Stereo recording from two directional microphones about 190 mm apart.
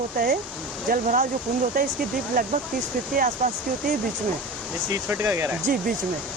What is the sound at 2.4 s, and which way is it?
Speech, 45° right (ahead or behind).